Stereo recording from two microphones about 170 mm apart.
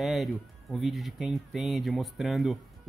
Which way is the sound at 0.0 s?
Centre (ahead or behind).